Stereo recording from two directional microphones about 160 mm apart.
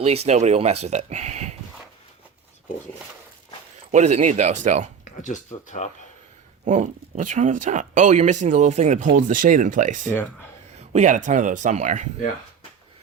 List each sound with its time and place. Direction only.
0.0 s speech: 40° right (ahead or behind)
3.9 s speech: 45° right (ahead or behind)
5.2 s speech: 50° left (ahead or behind)
6.7 s speech: 50° right (ahead or behind)
10.1 s speech: 15° left (ahead or behind)
10.8 s speech: 50° right (ahead or behind)